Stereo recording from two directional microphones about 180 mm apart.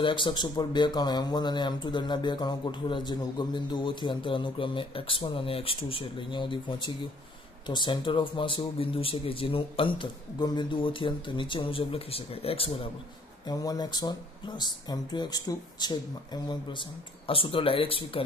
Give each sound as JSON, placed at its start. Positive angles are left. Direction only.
{"t": 0.0, "sound": "speech", "side_deg": 25}
{"t": 13.5, "sound": "speech", "side_deg": 20}